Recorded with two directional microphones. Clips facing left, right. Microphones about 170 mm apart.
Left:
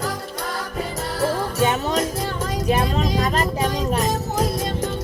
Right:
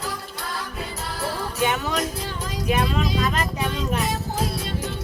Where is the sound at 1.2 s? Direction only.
40° left (ahead or behind).